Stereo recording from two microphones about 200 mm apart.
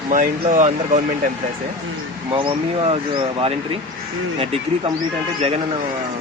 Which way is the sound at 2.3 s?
25° right (ahead or behind).